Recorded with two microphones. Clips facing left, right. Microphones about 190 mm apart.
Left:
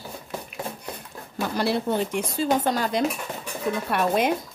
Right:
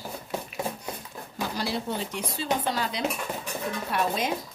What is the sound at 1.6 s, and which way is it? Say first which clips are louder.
Speech: left 8 dB; 60° left (ahead or behind).